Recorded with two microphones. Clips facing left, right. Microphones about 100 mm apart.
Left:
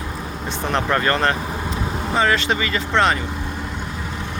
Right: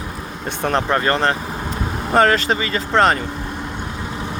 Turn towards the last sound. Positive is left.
turn(degrees=-40)  # may be behind; listen again after turning